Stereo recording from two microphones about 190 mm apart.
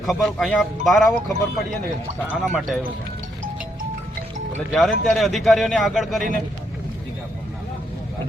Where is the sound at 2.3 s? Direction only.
Centre (ahead or behind).